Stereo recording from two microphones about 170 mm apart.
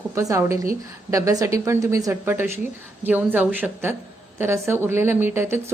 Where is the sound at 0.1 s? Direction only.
20° right (ahead or behind).